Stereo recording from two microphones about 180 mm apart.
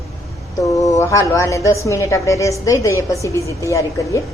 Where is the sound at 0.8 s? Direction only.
20° left (ahead or behind).